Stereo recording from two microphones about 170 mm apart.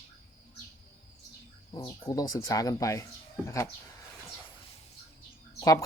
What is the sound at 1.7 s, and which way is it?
Speech, 20° left (ahead or behind).